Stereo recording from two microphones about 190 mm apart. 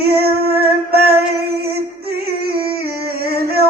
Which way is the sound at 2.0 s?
55° right (ahead or behind).